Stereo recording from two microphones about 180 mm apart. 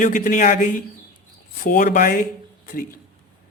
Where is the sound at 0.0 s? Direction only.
45° left (ahead or behind).